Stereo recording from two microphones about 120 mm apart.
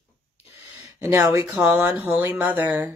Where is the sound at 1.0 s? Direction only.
25° right (ahead or behind).